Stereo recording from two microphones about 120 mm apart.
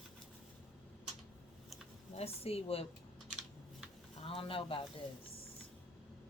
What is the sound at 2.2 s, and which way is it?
Speech, 55° left (ahead or behind).